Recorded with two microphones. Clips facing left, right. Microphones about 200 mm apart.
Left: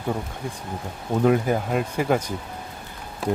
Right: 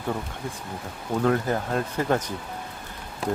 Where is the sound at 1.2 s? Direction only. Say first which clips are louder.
Left 4 dB; 15° left (ahead or behind).